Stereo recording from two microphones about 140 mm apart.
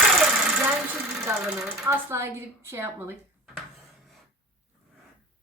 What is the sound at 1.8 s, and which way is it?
A woman's voice, 20° right (ahead or behind).